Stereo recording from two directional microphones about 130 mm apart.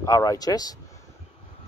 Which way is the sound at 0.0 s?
25° left (ahead or behind).